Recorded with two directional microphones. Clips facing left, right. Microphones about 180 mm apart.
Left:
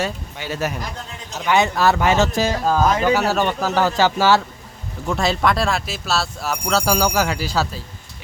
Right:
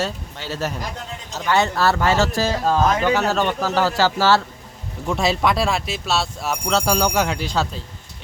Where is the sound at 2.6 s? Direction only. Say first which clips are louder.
Left 1 dB; 5° left (ahead or behind).